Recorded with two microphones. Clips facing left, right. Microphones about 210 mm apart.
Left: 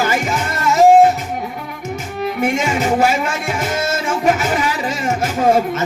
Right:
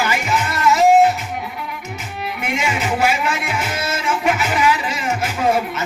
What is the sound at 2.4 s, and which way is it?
Music, 45° left (ahead or behind).